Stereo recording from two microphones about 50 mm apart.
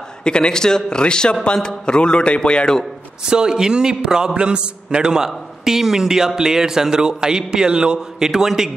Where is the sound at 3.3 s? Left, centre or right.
Centre.